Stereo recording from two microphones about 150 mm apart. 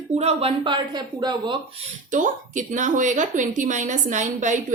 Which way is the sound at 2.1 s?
60° right (ahead or behind).